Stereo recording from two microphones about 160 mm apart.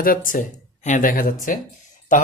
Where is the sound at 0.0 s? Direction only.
60° left (ahead or behind).